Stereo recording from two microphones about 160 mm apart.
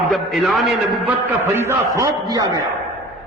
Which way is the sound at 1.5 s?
15° right (ahead or behind).